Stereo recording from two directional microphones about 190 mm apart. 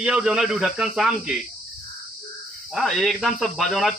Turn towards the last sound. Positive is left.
turn(degrees=0)  # may be behind; listen again after turning